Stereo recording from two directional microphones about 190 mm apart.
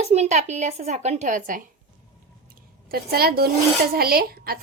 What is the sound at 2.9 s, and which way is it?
Speech, 55° right (ahead or behind).